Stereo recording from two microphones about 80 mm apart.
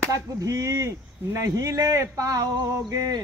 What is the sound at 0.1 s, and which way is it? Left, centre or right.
Speech, right.